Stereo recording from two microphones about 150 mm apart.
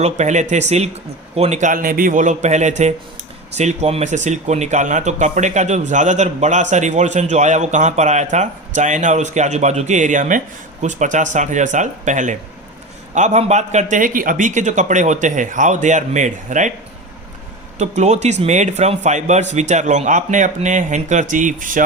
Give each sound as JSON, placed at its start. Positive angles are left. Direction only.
{"t": 0.0, "sound": "speech", "side_deg": -50}
{"t": 17.7, "sound": "speech", "side_deg": -50}